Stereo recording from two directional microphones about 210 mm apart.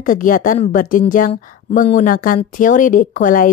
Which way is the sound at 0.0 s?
40° left (ahead or behind).